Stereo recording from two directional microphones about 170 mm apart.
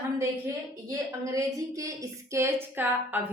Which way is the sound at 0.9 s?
20° right (ahead or behind).